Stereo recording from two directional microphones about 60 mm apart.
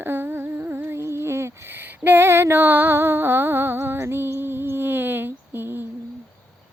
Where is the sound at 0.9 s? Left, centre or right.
Right.